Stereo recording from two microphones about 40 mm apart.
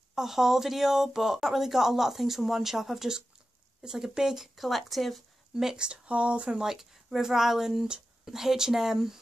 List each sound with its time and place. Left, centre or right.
0.1 s speech: centre
4.6 s speech: centre
5.5 s speech: centre
5.8 s speech: right
6.6 s speech: centre